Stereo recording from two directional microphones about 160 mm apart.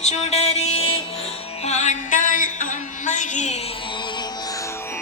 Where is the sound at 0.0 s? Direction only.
45° left (ahead or behind).